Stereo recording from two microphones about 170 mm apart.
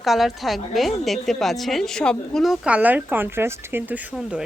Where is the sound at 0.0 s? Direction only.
Centre (ahead or behind).